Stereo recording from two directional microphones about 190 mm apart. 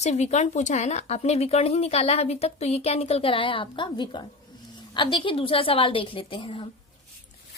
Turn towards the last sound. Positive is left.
turn(degrees=25)  # may be behind; listen again after turning